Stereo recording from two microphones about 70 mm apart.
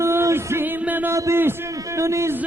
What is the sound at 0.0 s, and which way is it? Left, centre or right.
Music, right.